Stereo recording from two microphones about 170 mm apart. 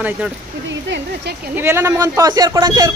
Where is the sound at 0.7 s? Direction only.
90° right.